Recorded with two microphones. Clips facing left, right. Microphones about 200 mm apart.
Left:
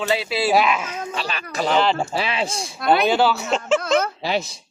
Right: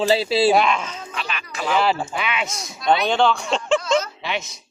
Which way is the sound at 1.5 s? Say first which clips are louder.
Left 3 dB; 40° left (ahead or behind).